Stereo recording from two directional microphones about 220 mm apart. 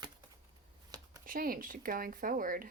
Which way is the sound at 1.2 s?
40° right (ahead or behind).